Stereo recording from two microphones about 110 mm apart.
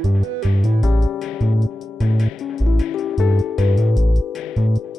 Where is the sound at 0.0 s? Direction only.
Centre (ahead or behind).